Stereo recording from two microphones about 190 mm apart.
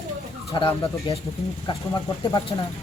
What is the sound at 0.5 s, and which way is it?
Speech, 25° left (ahead or behind).